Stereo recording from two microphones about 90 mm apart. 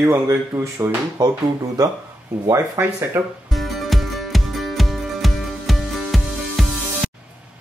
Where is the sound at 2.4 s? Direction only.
40° right (ahead or behind).